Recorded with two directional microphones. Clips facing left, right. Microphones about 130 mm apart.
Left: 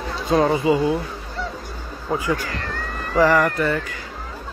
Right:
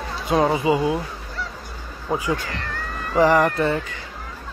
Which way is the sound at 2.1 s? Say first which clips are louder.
Left 1 dB; 20° right (ahead or behind).